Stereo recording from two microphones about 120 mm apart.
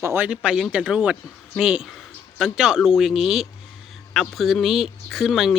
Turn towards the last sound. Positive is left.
turn(degrees=0)  # may be behind; listen again after turning